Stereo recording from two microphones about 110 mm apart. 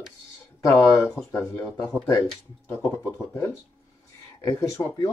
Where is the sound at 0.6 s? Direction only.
30° left (ahead or behind).